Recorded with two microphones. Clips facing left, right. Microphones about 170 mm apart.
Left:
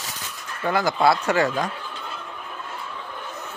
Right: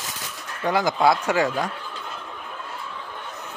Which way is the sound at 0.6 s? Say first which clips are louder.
Even; 15° right (ahead or behind).